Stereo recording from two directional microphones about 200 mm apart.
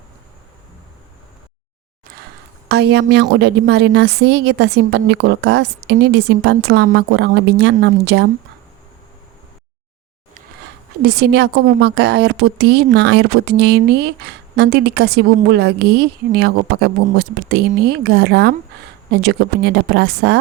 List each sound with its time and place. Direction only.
2.6 s a woman's voice: 55° right (ahead or behind)
11.0 s a woman's voice: 55° right (ahead or behind)